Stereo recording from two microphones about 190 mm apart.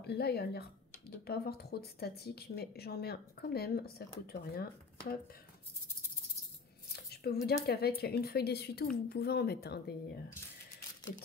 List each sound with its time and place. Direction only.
0.0 s speech: 60° left (ahead or behind)
7.1 s a woman's voice: 55° left (ahead or behind)